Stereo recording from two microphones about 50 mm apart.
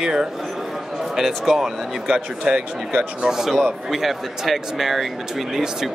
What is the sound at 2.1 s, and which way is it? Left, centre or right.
Speech, right.